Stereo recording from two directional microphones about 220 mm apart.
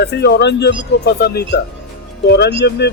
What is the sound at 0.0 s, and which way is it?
Speech, 50° left (ahead or behind).